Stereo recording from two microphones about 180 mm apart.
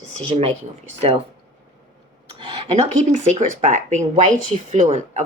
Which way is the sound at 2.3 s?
25° right (ahead or behind).